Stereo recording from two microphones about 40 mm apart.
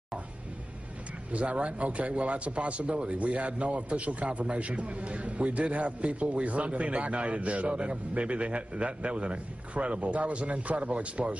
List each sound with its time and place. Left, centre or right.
1.3 s a man's voice: right